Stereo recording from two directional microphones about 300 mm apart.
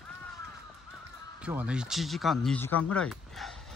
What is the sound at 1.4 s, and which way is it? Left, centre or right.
Speech, centre.